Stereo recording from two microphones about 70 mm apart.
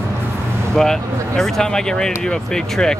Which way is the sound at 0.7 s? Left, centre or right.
Centre.